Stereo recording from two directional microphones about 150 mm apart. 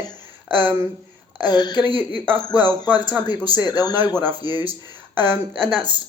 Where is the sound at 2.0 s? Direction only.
15° right (ahead or behind).